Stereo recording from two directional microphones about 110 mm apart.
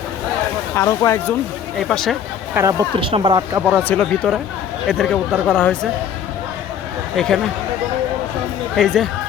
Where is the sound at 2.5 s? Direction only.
25° right (ahead or behind).